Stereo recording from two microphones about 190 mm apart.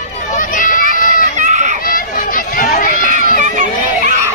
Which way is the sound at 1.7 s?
45° left (ahead or behind).